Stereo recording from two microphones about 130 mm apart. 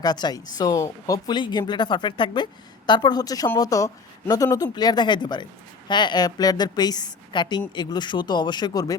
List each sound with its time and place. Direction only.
0.0 s speech: 30° left (ahead or behind)